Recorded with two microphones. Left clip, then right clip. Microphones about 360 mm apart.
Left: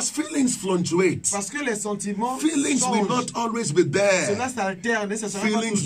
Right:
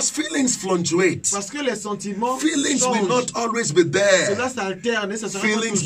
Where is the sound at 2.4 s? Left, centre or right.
Centre.